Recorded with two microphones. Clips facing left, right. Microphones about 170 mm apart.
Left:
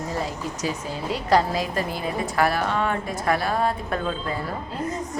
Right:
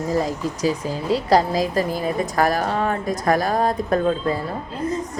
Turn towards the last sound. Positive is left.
turn(degrees=-40)  # may be behind; listen again after turning